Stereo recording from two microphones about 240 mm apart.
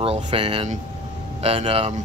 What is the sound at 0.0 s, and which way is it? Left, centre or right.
A man's voice, right.